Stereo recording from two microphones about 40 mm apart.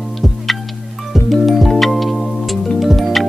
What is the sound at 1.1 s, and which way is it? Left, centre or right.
Music, centre.